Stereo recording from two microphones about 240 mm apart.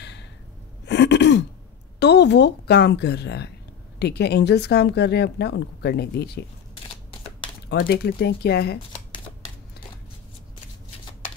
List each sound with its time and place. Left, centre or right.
0.0 s gasp: left
0.8 s throat clearing: left
2.0 s speech: left
7.7 s speech: left